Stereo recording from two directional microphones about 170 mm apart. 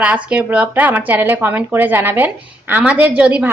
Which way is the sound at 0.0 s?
5° right (ahead or behind).